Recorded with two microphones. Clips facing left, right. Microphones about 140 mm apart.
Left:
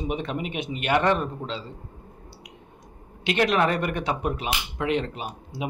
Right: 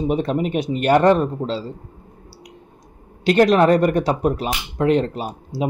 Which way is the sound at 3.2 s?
40° right (ahead or behind).